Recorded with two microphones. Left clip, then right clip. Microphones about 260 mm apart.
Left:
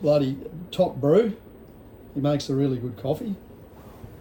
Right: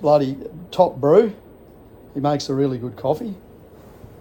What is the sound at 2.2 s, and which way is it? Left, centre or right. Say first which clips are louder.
A man's voice: right 4 dB; centre.